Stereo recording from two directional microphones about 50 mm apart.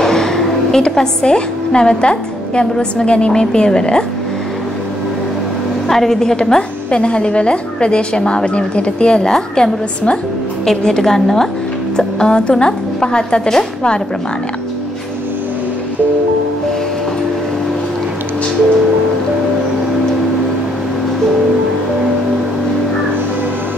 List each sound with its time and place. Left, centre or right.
0.0 s a woman's voice: centre
5.9 s a woman's voice: centre